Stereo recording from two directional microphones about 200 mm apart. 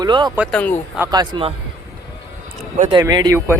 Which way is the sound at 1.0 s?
20° right (ahead or behind).